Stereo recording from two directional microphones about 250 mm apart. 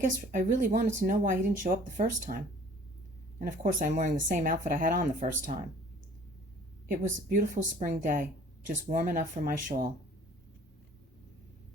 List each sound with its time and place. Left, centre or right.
0.0 s speech: right
6.8 s speech: right